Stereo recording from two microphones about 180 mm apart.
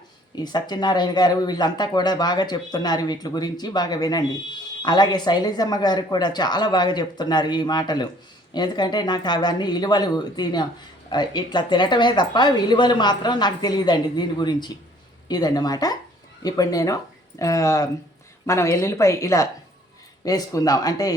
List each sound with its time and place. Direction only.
0.3 s a woman's voice: 25° left (ahead or behind)